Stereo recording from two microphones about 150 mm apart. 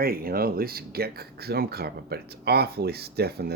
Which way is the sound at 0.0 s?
80° right.